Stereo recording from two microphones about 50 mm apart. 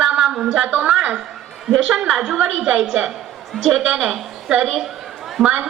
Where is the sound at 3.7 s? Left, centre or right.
Centre.